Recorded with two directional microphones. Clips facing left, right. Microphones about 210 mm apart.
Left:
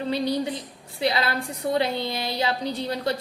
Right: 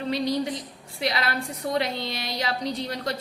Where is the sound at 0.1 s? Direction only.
30° left (ahead or behind).